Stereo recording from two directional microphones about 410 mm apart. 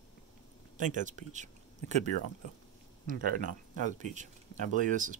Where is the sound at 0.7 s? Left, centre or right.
Centre.